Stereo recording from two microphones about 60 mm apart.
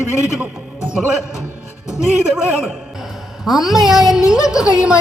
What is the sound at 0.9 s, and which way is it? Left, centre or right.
A man's voice, centre.